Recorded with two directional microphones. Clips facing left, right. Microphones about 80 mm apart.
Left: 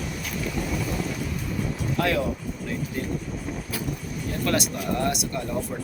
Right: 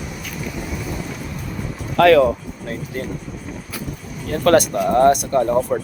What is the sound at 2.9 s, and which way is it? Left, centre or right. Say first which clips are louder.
Speech: right 5 dB; right.